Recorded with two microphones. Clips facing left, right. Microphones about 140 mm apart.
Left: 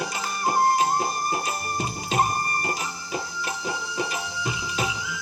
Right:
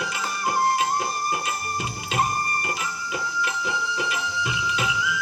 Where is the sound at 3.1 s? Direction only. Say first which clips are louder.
Right 2 dB; 35° left (ahead or behind).